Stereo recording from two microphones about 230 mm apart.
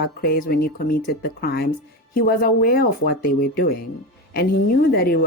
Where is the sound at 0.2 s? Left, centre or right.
Left.